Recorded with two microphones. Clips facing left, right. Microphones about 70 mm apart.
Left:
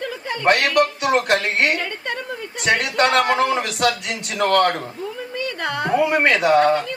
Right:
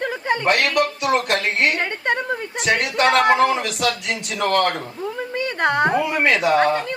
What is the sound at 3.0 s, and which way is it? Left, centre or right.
Speech, right.